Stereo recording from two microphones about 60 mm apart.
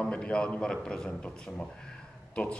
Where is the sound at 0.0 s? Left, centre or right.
Centre.